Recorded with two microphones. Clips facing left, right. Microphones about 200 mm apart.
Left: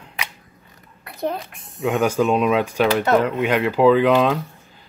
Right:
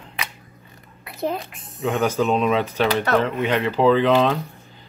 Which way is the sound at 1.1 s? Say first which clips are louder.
Even; 5° right (ahead or behind).